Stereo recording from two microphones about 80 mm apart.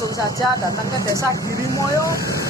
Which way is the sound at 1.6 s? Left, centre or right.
Left.